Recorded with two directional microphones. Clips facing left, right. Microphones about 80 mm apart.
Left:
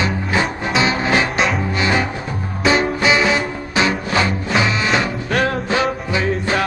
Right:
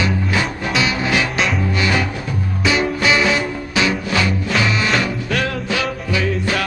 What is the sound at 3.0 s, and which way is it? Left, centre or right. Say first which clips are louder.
Music: even; left.